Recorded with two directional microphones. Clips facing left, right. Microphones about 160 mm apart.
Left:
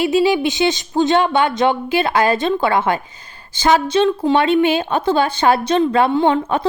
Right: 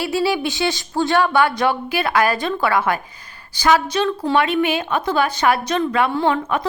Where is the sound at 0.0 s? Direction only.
20° left (ahead or behind).